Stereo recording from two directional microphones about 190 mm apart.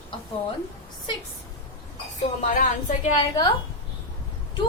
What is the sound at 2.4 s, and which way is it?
Speech, 40° left (ahead or behind).